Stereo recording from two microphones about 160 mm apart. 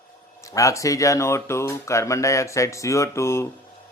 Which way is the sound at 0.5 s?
20° left (ahead or behind).